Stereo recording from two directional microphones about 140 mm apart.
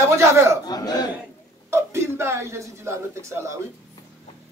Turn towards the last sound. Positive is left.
turn(degrees=-20)  # may be behind; listen again after turning